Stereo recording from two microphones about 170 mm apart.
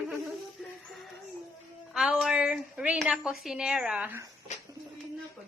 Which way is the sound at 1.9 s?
5° right (ahead or behind).